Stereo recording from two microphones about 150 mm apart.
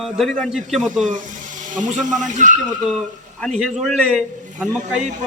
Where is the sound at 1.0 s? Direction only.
60° right (ahead or behind).